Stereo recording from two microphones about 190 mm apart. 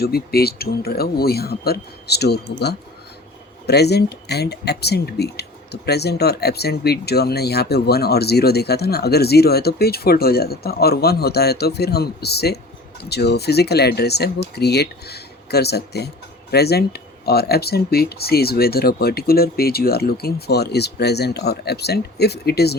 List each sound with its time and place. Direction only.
0.0 s speech: 55° left (ahead or behind)